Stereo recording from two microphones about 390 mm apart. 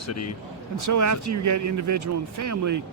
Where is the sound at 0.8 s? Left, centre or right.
Right.